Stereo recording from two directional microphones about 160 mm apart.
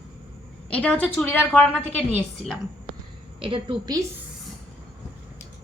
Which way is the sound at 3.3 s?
35° right (ahead or behind).